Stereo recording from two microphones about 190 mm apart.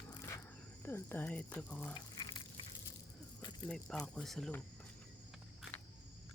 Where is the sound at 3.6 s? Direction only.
5° left (ahead or behind).